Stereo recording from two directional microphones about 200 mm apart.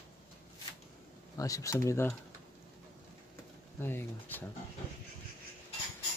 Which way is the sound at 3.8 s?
10° left (ahead or behind).